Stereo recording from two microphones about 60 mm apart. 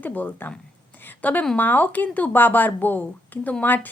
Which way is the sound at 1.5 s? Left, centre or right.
Left.